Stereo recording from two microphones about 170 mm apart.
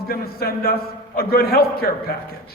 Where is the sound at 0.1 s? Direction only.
65° left (ahead or behind).